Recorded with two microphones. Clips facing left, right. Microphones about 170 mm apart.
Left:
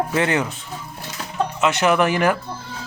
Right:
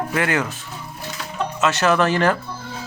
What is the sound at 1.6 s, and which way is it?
Speech, 15° left (ahead or behind).